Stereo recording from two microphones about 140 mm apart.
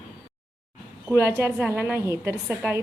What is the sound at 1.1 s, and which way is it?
A woman's voice, 20° right (ahead or behind).